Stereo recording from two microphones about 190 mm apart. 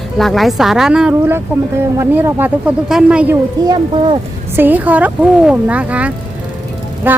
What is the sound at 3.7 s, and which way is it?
Speech, 25° right (ahead or behind).